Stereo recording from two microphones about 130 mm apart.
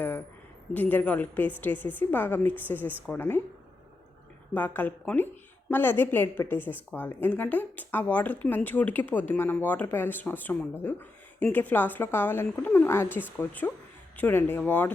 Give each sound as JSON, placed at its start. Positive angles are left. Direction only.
{"t": 0.7, "sound": "a woman's voice", "side_deg": 15}
{"t": 4.5, "sound": "a woman's voice", "side_deg": 15}